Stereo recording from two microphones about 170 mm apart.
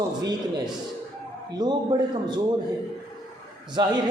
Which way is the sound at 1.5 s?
25° right (ahead or behind).